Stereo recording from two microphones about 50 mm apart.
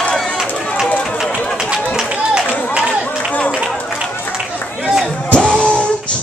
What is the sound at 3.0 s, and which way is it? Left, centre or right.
Run, left.